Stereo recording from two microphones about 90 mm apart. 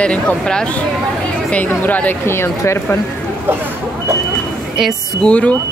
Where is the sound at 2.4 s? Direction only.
30° left (ahead or behind).